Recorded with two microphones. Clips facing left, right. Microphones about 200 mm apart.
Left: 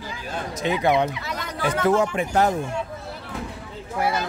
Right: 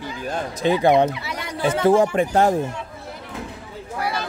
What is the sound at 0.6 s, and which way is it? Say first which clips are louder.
Speech: right 4 dB; 30° right (ahead or behind).